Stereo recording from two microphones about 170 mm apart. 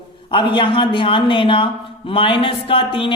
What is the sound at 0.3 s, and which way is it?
A man's voice, 30° left (ahead or behind).